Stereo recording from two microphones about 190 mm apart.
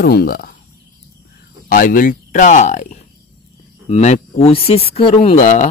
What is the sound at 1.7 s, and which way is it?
Speech, 45° left (ahead or behind).